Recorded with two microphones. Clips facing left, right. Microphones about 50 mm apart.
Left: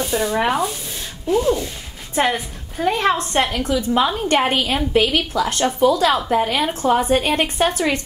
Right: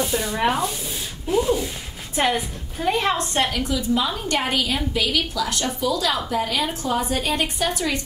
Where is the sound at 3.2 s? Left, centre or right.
Left.